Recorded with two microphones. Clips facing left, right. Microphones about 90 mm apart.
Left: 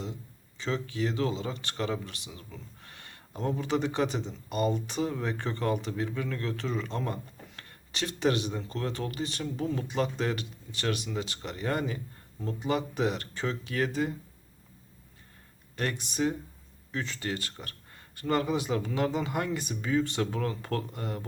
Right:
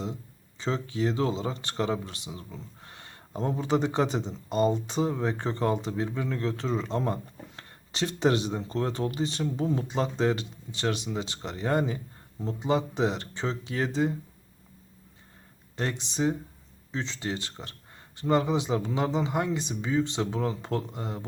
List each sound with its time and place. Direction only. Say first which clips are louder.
0.6 s speech: right 3 dB; 30° right (ahead or behind)
15.7 s speech: right 1 dB; 25° right (ahead or behind)